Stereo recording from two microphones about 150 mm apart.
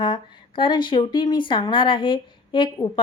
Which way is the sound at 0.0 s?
35° left (ahead or behind).